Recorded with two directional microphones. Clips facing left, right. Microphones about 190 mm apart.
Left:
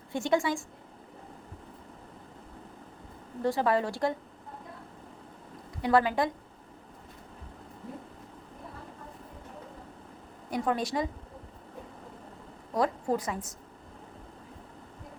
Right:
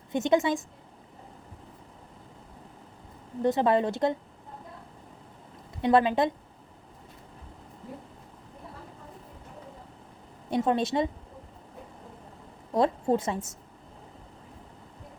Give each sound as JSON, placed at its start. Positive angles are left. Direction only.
{"t": 0.1, "sound": "a woman's voice", "side_deg": -20}
{"t": 3.4, "sound": "a woman's voice", "side_deg": -20}
{"t": 5.8, "sound": "a woman's voice", "side_deg": -20}
{"t": 10.5, "sound": "a woman's voice", "side_deg": -25}
{"t": 12.7, "sound": "a woman's voice", "side_deg": -25}